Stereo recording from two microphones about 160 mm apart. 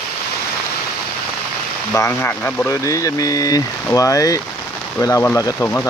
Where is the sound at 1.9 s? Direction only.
15° left (ahead or behind).